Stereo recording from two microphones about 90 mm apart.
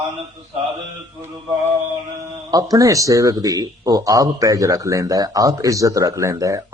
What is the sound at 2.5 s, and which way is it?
Speech, 40° right (ahead or behind).